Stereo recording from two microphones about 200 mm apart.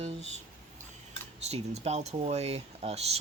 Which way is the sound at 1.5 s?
30° right (ahead or behind).